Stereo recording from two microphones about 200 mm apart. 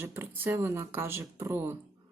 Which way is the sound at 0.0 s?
10° right (ahead or behind).